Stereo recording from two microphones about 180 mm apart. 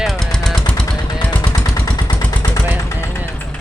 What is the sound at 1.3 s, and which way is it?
Vehicle, 20° left (ahead or behind).